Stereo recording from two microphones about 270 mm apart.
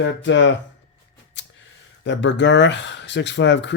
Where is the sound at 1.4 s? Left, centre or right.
Left.